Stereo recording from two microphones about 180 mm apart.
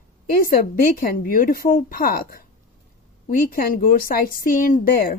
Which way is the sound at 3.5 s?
55° left (ahead or behind).